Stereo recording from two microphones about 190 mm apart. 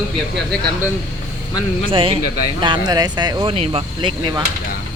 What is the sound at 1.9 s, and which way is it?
Speech, 30° right (ahead or behind).